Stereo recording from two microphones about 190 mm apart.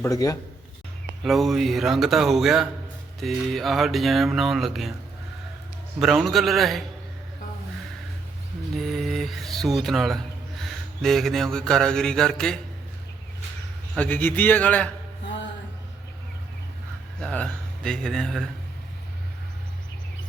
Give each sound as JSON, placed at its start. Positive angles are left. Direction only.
{"t": 0.0, "sound": "a man's voice", "side_deg": 20}
{"t": 1.2, "sound": "speech", "side_deg": 0}
{"t": 6.0, "sound": "speech", "side_deg": 0}
{"t": 8.7, "sound": "speech", "side_deg": 0}
{"t": 10.6, "sound": "mantra", "side_deg": 0}
{"t": 13.9, "sound": "a man's voice", "side_deg": 10}
{"t": 17.2, "sound": "speech", "side_deg": 5}